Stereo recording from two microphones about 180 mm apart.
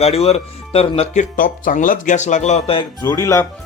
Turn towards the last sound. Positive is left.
turn(degrees=15)  # may be behind; listen again after turning